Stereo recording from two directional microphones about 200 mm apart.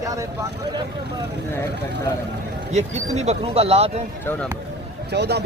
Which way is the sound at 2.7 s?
35° right (ahead or behind).